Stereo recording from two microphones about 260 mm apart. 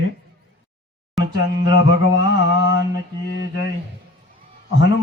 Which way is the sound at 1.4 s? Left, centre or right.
Left.